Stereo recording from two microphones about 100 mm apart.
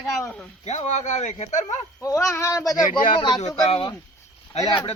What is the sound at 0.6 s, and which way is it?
Speech, 90° left.